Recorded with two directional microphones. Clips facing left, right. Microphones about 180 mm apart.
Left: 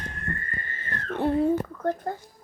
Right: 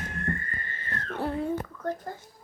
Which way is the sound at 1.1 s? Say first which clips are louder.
Left 6 dB; 25° left (ahead or behind).